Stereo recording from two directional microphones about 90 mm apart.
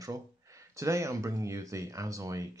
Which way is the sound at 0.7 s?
35° right (ahead or behind).